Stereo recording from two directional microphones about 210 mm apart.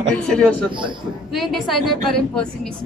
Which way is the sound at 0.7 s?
25° right (ahead or behind).